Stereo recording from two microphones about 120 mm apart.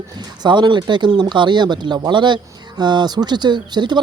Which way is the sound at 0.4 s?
40° right (ahead or behind).